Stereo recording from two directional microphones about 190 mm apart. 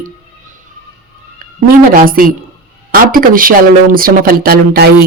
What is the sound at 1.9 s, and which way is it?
Speech, 50° right (ahead or behind).